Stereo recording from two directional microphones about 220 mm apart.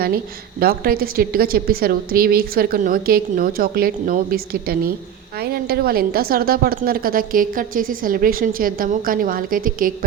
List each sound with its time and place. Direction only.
0.6 s a woman's voice: 45° right (ahead or behind)